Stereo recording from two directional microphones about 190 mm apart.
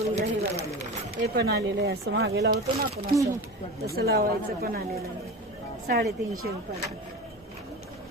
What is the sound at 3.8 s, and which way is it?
Speech, 55° right (ahead or behind).